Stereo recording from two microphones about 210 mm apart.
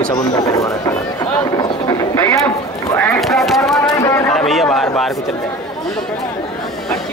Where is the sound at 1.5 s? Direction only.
15° left (ahead or behind).